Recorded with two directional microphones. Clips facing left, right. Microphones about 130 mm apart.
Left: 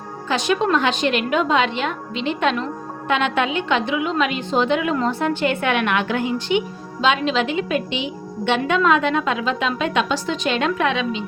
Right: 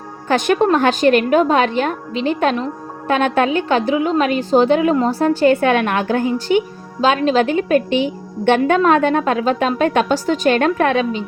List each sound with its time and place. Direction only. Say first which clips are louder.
0.3 s a woman's voice: right 5 dB; 50° right (ahead or behind)